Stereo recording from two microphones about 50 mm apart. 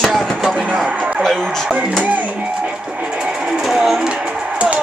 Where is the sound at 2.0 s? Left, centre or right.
Right.